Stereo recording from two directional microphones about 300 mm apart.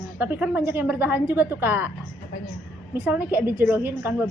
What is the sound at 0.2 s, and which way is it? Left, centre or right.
A woman's voice, centre.